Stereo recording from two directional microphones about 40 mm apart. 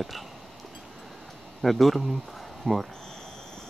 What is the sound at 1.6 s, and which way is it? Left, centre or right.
Speech, centre.